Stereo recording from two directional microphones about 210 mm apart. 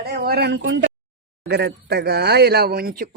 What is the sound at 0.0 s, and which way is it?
A woman's voice, 50° right (ahead or behind).